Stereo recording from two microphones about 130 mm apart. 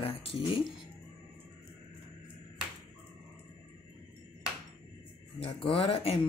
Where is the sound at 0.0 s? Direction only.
45° left (ahead or behind).